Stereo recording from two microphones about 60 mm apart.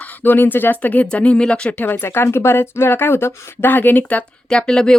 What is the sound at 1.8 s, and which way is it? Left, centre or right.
Speech, left.